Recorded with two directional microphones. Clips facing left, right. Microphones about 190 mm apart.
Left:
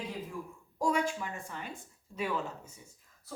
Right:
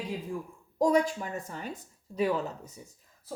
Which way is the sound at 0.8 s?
40° right (ahead or behind).